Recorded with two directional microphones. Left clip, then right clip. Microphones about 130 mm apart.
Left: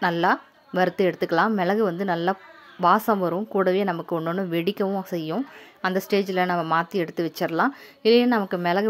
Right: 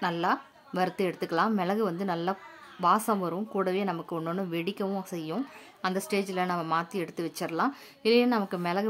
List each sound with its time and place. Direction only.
0.0 s a woman's voice: 30° left (ahead or behind)